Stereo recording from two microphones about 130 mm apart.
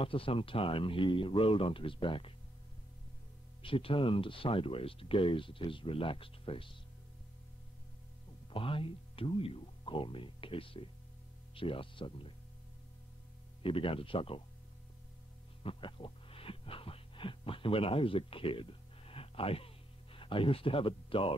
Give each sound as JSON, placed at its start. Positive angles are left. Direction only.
{"t": 0.0, "sound": "speech", "side_deg": 45}
{"t": 3.6, "sound": "speech", "side_deg": 45}
{"t": 8.5, "sound": "speech", "side_deg": 45}
{"t": 13.6, "sound": "speech", "side_deg": 45}
{"t": 15.6, "sound": "music", "side_deg": 45}